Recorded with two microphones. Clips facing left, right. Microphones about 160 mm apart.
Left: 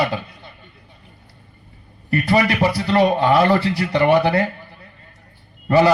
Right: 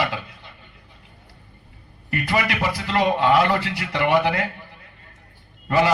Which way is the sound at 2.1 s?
35° left (ahead or behind).